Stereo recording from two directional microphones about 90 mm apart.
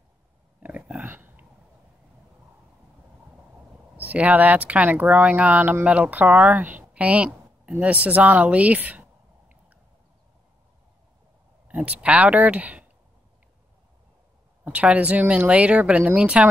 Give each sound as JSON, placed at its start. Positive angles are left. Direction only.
{"t": 0.6, "sound": "a sound", "side_deg": -15}
{"t": 3.9, "sound": "speech", "side_deg": -20}
{"t": 11.6, "sound": "speech", "side_deg": -15}
{"t": 14.6, "sound": "speech", "side_deg": -15}